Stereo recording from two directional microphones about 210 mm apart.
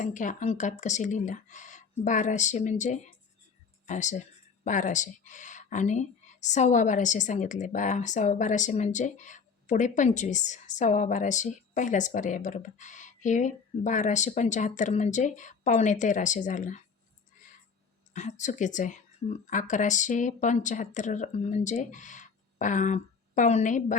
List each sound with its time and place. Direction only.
0.0 s speech: 40° left (ahead or behind)
18.1 s speech: 35° left (ahead or behind)